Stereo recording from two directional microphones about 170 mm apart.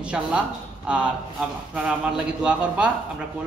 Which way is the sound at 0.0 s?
5° right (ahead or behind).